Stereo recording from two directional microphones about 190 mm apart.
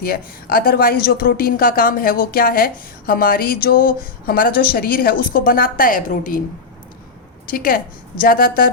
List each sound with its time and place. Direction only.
0.0 s speech: 50° left (ahead or behind)
7.4 s a woman's voice: 50° left (ahead or behind)